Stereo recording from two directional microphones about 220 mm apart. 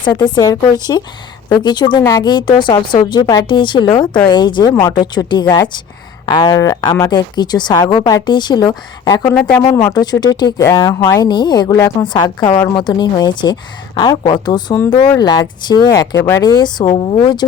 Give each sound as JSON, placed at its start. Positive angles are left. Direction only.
{"t": 0.3, "sound": "speech", "side_deg": 15}